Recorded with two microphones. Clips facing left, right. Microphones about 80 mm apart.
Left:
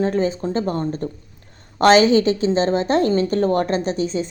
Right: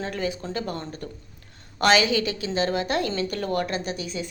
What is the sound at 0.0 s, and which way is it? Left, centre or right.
Speech, left.